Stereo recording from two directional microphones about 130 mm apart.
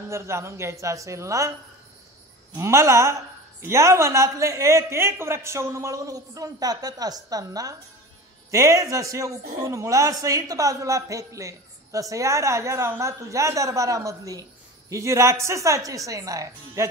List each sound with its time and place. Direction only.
0.1 s a man's voice: 20° right (ahead or behind)
2.5 s a man's voice: 20° right (ahead or behind)